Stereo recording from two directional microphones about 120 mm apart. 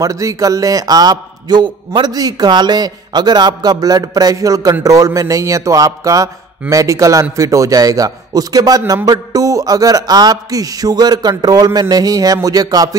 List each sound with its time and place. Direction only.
0.0 s a man's voice: 30° right (ahead or behind)